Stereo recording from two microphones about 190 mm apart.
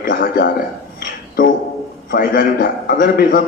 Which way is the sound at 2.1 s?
50° left (ahead or behind).